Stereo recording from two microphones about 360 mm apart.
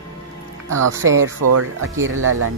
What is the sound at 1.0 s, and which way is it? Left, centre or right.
Speech, right.